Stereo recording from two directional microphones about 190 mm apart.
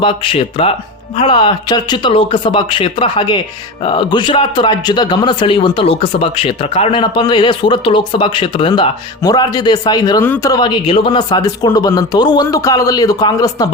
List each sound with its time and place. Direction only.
0.0 s a man's voice: 25° left (ahead or behind)